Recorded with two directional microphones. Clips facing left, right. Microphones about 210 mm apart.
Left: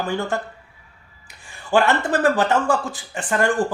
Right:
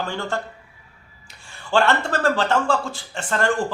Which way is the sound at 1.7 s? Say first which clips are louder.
Left 2 dB; 15° left (ahead or behind).